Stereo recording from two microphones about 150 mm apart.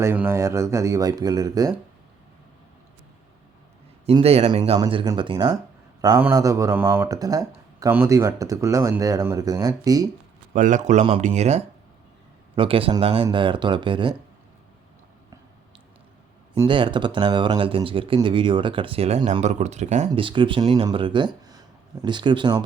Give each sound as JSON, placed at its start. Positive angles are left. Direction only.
{"t": 0.0, "sound": "speech", "side_deg": -15}
{"t": 4.0, "sound": "speech", "side_deg": -40}
{"t": 4.8, "sound": "speech", "side_deg": -30}
{"t": 10.5, "sound": "a man's voice", "side_deg": -55}
{"t": 12.5, "sound": "speech", "side_deg": -35}
{"t": 16.6, "sound": "speech", "side_deg": -35}
{"t": 20.1, "sound": "speech", "side_deg": -35}